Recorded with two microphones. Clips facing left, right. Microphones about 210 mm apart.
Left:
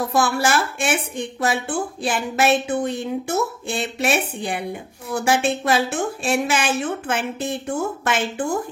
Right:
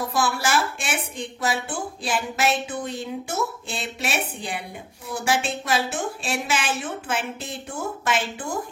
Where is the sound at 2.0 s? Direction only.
55° left (ahead or behind).